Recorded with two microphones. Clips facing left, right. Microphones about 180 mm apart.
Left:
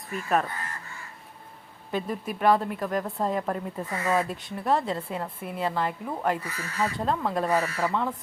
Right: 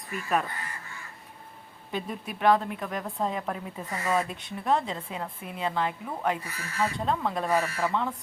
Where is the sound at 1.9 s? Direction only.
Centre (ahead or behind).